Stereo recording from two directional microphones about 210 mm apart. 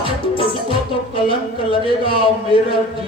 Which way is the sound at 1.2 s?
25° left (ahead or behind).